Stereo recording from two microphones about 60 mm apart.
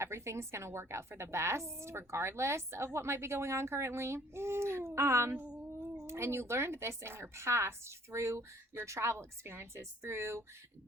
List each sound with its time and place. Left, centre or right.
0.0 s a woman's voice: right